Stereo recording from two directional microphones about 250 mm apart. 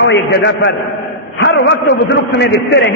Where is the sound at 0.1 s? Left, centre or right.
Left.